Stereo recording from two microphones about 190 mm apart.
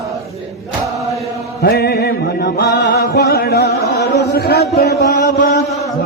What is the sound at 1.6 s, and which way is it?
Chant, 55° left (ahead or behind).